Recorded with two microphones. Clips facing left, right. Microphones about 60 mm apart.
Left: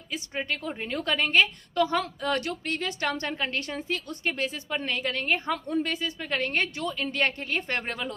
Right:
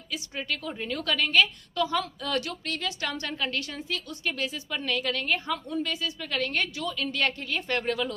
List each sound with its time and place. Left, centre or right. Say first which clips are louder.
0.1 s a woman's voice: left 2 dB; left